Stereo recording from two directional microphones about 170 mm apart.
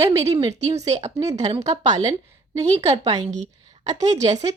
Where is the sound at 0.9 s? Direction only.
40° right (ahead or behind).